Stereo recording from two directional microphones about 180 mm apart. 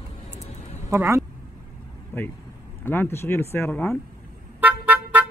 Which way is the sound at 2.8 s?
10° left (ahead or behind).